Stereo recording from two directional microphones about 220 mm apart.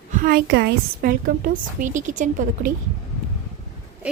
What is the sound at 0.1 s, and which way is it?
A woman's voice, 40° right (ahead or behind).